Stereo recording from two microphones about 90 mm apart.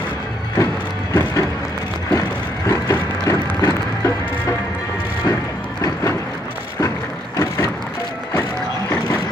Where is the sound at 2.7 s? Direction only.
35° left (ahead or behind).